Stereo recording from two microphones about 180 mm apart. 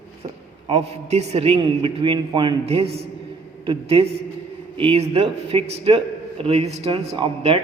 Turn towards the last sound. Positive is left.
turn(degrees=-30)  # may be behind; listen again after turning